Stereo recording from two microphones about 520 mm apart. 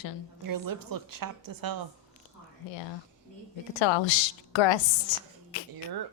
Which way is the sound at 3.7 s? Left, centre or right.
Left.